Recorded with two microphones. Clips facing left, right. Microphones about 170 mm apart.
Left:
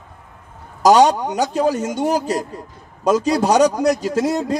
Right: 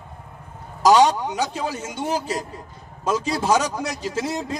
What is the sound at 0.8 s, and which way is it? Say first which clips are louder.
A man's voice: left 3 dB; 45° left (ahead or behind).